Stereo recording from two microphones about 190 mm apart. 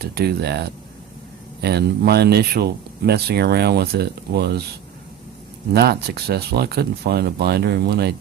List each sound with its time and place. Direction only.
0.0 s speech: 55° right (ahead or behind)
5.7 s speech: 55° right (ahead or behind)